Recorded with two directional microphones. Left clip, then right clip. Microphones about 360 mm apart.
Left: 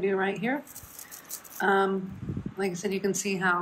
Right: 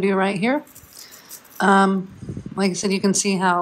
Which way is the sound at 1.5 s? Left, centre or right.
Right.